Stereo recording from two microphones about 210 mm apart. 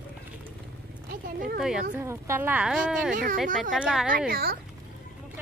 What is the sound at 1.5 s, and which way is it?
Speech, 5° right (ahead or behind).